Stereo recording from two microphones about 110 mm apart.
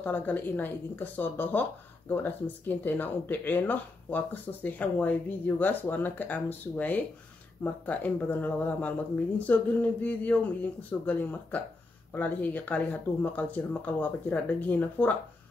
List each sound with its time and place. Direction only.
0.0 s speech: 15° left (ahead or behind)